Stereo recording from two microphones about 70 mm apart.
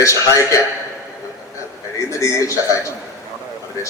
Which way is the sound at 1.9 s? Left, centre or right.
Left.